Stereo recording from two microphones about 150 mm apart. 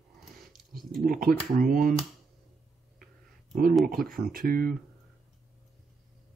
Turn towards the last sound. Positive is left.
turn(degrees=-70)  # may be behind; listen again after turning